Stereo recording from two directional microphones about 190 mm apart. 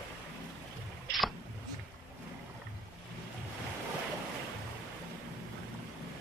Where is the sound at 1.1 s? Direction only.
Centre (ahead or behind).